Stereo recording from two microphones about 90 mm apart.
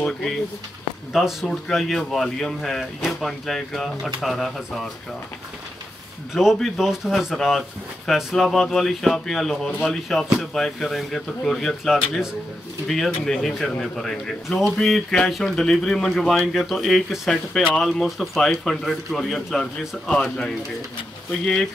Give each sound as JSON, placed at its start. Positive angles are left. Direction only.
{"t": 1.1, "sound": "speech", "side_deg": 0}
{"t": 6.3, "sound": "a man's voice", "side_deg": -5}